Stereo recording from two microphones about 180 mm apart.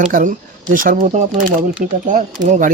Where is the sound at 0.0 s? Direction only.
45° right (ahead or behind).